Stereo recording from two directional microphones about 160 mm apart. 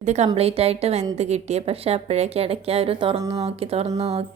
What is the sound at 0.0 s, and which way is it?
A woman's voice, 45° right (ahead or behind).